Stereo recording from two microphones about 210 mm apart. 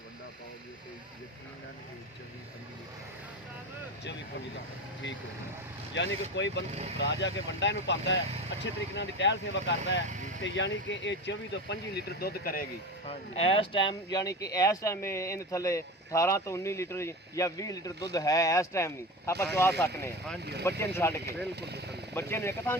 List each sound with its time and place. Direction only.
5.9 s speech: 60° left (ahead or behind)
6.7 s speech: 35° right (ahead or behind)
7.0 s speech: 60° left (ahead or behind)
13.1 s speech: 30° left (ahead or behind); by 20.4 s 10° left (ahead or behind)
20.4 s speech: 50° right (ahead or behind)
20.7 s speech: 10° left (ahead or behind)
21.5 s speech: 50° right (ahead or behind)
22.1 s speech: 10° left (ahead or behind)